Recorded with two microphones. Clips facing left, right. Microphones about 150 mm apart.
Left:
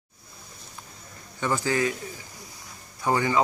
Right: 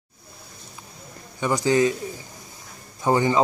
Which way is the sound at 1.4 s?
15° right (ahead or behind).